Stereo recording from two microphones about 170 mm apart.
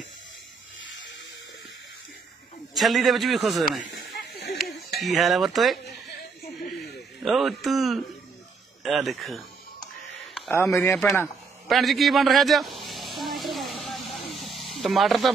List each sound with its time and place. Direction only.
2.7 s a man's voice: centre (ahead or behind)
4.1 s a sound: 70° left (ahead or behind)
5.0 s a man's voice: centre (ahead or behind)
7.2 s a man's voice: centre (ahead or behind)
10.5 s speech: 10° left (ahead or behind)
11.6 s a sound: centre (ahead or behind)